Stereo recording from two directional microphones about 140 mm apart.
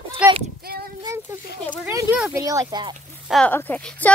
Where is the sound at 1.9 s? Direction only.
20° right (ahead or behind).